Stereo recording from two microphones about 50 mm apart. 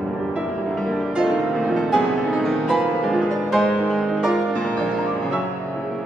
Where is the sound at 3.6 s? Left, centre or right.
Left.